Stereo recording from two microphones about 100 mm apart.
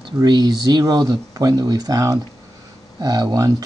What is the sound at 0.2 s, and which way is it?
Speech, 45° right (ahead or behind).